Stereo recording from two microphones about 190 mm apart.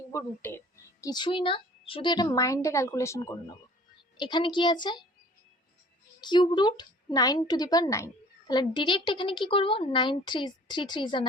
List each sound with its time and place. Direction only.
0.1 s a woman's voice: 15° left (ahead or behind)
6.2 s a woman's voice: 25° left (ahead or behind)